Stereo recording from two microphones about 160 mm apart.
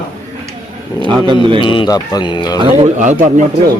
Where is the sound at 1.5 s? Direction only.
30° left (ahead or behind).